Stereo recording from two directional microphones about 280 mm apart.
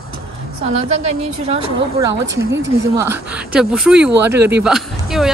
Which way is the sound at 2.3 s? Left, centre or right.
Right.